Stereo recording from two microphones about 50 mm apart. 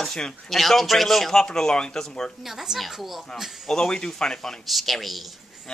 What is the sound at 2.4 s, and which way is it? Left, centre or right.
Speech, centre.